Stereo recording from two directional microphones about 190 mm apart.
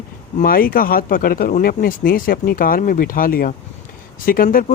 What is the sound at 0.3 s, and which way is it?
Speech, 50° left (ahead or behind).